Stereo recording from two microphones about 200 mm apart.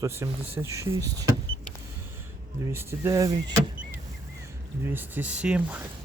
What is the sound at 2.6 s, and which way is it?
Speech, 15° right (ahead or behind).